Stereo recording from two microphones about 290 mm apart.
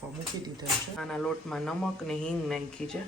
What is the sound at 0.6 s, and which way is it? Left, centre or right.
Speech, centre.